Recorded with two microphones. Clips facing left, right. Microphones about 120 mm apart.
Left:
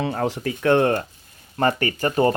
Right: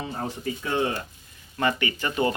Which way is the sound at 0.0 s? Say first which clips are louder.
Left 7 dB; 85° left.